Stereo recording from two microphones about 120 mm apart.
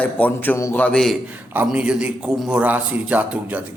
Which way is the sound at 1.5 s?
10° right (ahead or behind).